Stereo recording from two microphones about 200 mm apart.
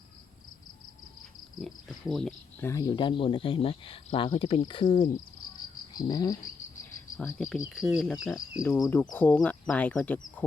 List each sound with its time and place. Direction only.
1.6 s speech: centre (ahead or behind)
2.6 s speech: 20° left (ahead or behind)
5.9 s cricket: 20° left (ahead or behind)
7.2 s speech: 10° left (ahead or behind)
7.8 s speech: centre (ahead or behind)
8.6 s speech: 10° left (ahead or behind)